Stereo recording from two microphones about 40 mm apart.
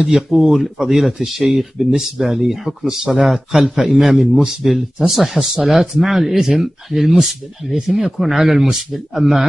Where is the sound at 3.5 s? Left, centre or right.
Centre.